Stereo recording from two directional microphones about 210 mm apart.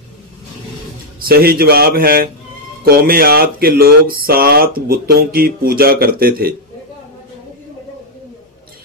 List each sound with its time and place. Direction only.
1.2 s speech: 45° right (ahead or behind)